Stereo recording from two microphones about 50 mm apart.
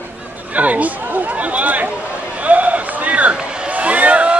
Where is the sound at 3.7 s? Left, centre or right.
Right.